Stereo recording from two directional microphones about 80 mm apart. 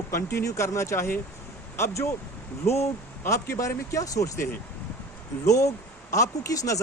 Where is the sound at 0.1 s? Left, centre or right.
Left.